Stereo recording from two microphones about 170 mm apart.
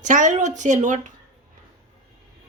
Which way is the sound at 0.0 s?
50° right (ahead or behind).